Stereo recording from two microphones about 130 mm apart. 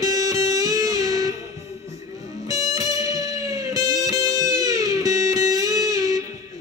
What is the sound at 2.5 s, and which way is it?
Music, 25° right (ahead or behind).